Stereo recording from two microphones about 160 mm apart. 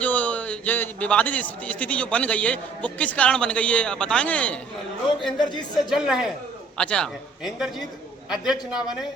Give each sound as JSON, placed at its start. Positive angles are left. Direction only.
{"t": 0.0, "sound": "a man's voice", "side_deg": 10}
{"t": 5.4, "sound": "speech", "side_deg": 25}
{"t": 5.9, "sound": "a man's voice", "side_deg": -5}